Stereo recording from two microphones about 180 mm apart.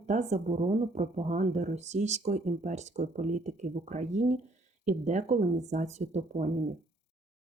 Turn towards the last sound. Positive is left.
turn(degrees=-40)  # may be behind; listen again after turning